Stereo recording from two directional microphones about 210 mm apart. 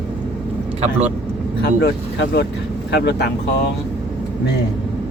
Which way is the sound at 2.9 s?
50° left (ahead or behind).